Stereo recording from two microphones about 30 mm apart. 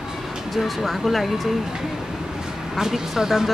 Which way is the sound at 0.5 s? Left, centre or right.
Centre.